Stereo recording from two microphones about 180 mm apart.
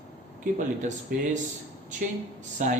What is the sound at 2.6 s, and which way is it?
Speech, 45° right (ahead or behind).